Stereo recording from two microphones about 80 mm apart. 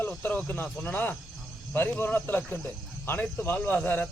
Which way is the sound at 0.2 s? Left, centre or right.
Left.